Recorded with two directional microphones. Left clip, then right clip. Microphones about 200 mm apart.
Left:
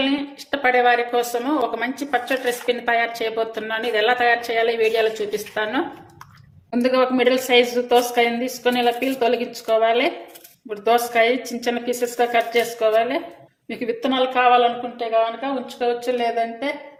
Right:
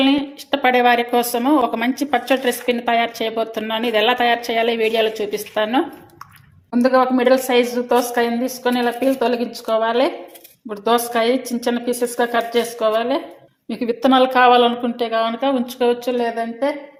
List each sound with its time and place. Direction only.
0.0 s a woman's voice: 30° right (ahead or behind)
6.7 s a woman's voice: 15° right (ahead or behind)
14.0 s a woman's voice: 35° right (ahead or behind)